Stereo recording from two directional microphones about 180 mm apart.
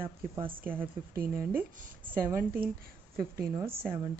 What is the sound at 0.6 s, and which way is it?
Speech, 10° right (ahead or behind).